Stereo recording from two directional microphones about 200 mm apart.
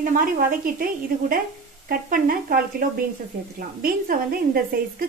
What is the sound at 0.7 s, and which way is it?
A woman's voice, 45° right (ahead or behind).